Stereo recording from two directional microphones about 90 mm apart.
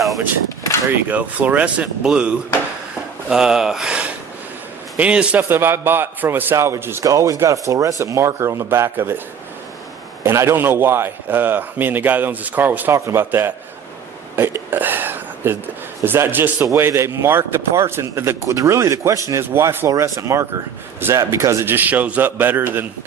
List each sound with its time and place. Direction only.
0.9 s speech: 20° right (ahead or behind)
5.4 s a man's voice: 25° right (ahead or behind)
7.0 s speech: 40° right (ahead or behind)
10.2 s a man's voice: 30° right (ahead or behind)
12.9 s a man's voice: 30° right (ahead or behind)